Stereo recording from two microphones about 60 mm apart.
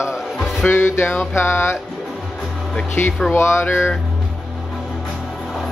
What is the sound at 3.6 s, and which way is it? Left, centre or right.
Speech, left.